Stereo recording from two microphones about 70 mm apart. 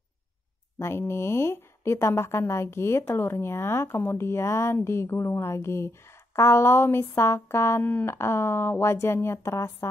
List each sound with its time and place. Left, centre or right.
0.7 s speech: left
7.8 s speech: left